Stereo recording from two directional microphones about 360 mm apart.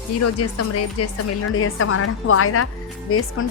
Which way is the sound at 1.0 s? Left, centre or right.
Left.